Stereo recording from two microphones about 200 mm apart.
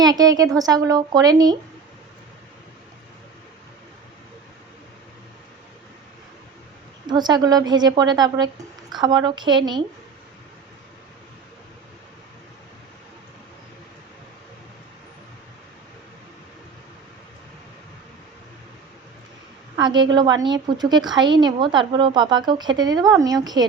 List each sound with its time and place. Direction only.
0.0 s a woman's voice: 20° right (ahead or behind)
7.1 s a woman's voice: 20° right (ahead or behind)
19.7 s a woman's voice: 20° right (ahead or behind)